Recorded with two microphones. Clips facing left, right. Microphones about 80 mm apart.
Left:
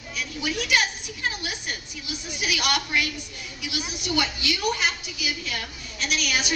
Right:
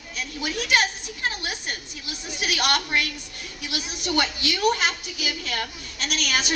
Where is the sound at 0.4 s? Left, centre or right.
Right.